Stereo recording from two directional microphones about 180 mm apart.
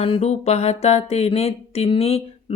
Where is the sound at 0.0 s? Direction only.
35° left (ahead or behind).